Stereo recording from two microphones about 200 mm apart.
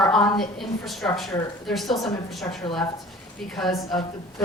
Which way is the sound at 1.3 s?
15° left (ahead or behind).